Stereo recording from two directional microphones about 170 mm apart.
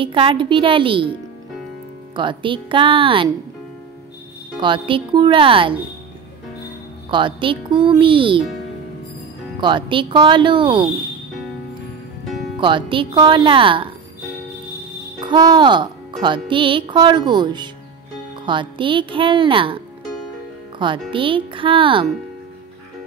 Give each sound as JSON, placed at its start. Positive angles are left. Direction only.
{"t": 0.0, "sound": "speech", "side_deg": -30}
{"t": 2.1, "sound": "speech", "side_deg": -30}
{"t": 4.6, "sound": "speech", "side_deg": -30}
{"t": 7.1, "sound": "speech", "side_deg": -30}
{"t": 9.6, "sound": "speech", "side_deg": -30}
{"t": 12.5, "sound": "speech", "side_deg": -30}
{"t": 15.1, "sound": "speech", "side_deg": -25}
{"t": 21.1, "sound": "speech", "side_deg": -30}